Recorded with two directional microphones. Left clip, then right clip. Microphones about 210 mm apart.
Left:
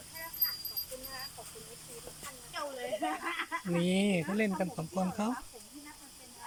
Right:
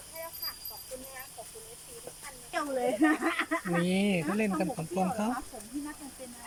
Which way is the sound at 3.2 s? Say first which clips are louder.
Right 5 dB; 50° right (ahead or behind).